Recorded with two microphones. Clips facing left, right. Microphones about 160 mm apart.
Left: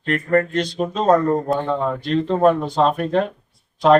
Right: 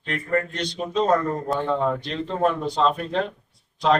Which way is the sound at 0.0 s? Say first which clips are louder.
Left 6 dB; 50° left (ahead or behind).